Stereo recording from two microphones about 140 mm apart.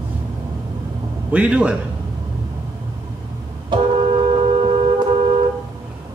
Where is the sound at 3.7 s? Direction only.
35° right (ahead or behind).